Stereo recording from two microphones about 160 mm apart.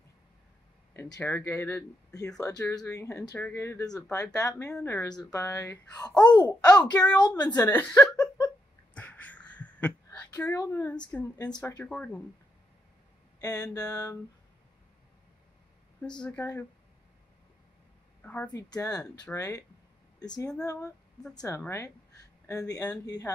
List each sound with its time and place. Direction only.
1.2 s speech: 15° left (ahead or behind)
4.6 s speech: 10° left (ahead or behind); by 7.4 s 25° left (ahead or behind)
7.7 s speech: 10° left (ahead or behind)
8.9 s a sound: 10° left (ahead or behind)
10.3 s speech: 20° left (ahead or behind)
11.3 s speech: 25° left (ahead or behind)
11.9 s speech: 5° left (ahead or behind)
13.4 s speech: 25° left (ahead or behind)
16.2 s speech: 5° left (ahead or behind)
18.2 s speech: 10° left (ahead or behind)
18.5 s speech: 20° left (ahead or behind)